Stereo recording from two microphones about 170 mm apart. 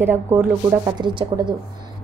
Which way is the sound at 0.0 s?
10° right (ahead or behind).